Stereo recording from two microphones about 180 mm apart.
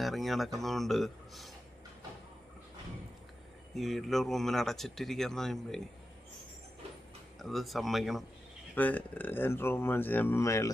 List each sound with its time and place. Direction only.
0.0 s speech: centre (ahead or behind)
3.7 s speech: centre (ahead or behind)
7.3 s speech: centre (ahead or behind); by 10.7 s 15° left (ahead or behind)